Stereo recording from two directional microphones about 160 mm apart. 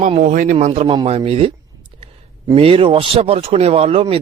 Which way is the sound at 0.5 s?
40° right (ahead or behind).